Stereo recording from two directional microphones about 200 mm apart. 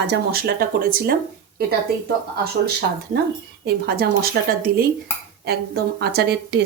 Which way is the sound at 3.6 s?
50° right (ahead or behind).